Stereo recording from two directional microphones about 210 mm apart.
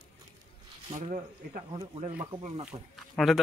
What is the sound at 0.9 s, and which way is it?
Speech, 35° right (ahead or behind).